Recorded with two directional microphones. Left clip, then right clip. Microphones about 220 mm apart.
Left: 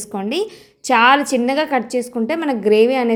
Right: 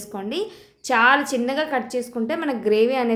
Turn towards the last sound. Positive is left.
turn(degrees=25)  # may be behind; listen again after turning